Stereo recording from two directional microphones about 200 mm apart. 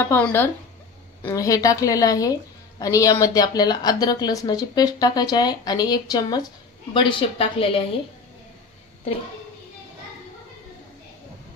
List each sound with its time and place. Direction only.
0.1 s a woman's voice: 10° left (ahead or behind); by 7.8 s 30° left (ahead or behind)